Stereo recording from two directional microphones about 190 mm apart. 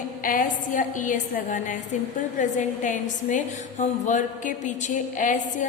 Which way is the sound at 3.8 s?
40° left (ahead or behind).